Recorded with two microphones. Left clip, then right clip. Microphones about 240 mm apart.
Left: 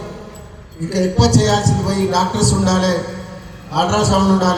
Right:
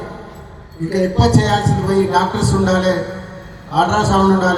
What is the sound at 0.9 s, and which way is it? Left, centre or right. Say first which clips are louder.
Speech: even; left.